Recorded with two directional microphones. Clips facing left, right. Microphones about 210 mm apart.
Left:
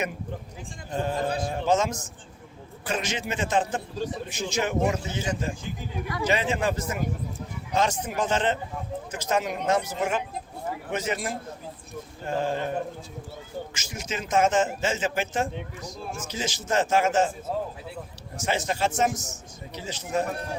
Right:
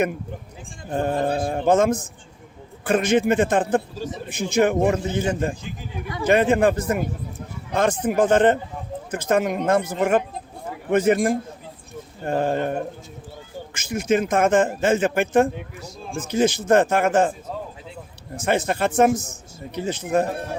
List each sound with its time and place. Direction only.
0.9 s a man's voice: 55° right (ahead or behind)
18.3 s speech: 55° right (ahead or behind)